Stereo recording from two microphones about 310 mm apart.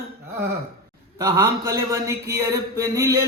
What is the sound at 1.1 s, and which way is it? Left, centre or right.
Mantra, centre.